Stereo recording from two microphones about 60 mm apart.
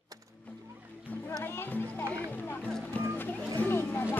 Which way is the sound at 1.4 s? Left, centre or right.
Left.